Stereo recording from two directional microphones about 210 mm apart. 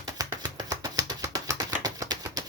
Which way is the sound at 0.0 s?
15° right (ahead or behind).